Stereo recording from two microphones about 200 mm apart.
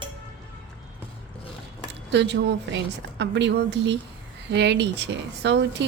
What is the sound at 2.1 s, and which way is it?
Speech, 60° right (ahead or behind).